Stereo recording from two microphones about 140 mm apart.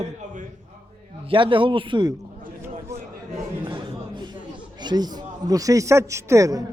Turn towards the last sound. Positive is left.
turn(degrees=-25)  # may be behind; listen again after turning